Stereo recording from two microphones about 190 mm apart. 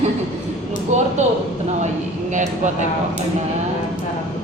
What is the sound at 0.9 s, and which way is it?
Speech, 35° right (ahead or behind).